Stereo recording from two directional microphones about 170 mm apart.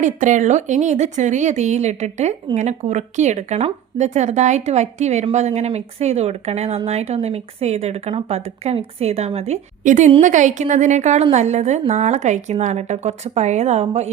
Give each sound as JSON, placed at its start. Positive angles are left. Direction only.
{"t": 0.0, "sound": "a woman's voice", "side_deg": -45}